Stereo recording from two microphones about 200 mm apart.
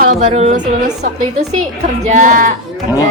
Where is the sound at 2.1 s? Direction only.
40° right (ahead or behind).